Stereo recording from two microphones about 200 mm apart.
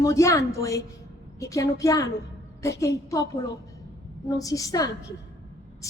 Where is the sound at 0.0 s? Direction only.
15° left (ahead or behind).